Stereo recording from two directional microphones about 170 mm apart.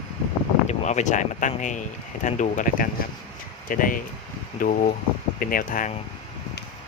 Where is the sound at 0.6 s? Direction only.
45° left (ahead or behind).